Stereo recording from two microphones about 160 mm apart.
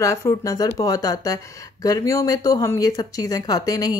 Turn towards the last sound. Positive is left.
turn(degrees=20)  # may be behind; listen again after turning